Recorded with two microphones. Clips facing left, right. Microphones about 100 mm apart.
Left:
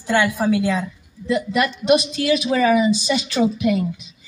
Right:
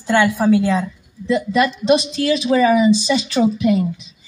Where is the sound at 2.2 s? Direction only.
25° right (ahead or behind).